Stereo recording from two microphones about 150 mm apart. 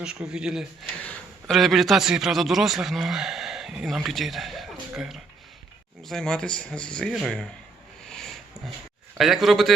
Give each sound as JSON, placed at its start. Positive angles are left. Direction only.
{"t": 0.0, "sound": "speech", "side_deg": -5}
{"t": 1.0, "sound": "a man's voice", "side_deg": 5}
{"t": 8.0, "sound": "a sound", "side_deg": 5}
{"t": 9.1, "sound": "speech", "side_deg": 0}